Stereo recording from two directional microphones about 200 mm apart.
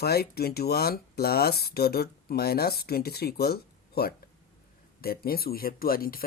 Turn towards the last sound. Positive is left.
turn(degrees=45)  # may be behind; listen again after turning